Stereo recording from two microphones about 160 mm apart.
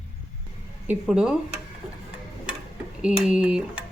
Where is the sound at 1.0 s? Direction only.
5° right (ahead or behind).